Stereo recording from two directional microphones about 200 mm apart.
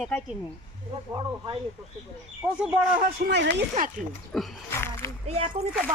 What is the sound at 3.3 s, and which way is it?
Speech, 60° right (ahead or behind).